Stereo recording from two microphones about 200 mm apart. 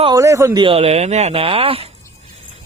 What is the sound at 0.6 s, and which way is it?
Speech, 30° right (ahead or behind).